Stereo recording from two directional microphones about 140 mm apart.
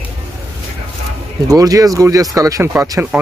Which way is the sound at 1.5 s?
25° right (ahead or behind).